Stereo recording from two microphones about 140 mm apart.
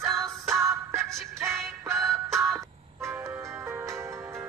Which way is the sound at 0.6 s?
20° right (ahead or behind).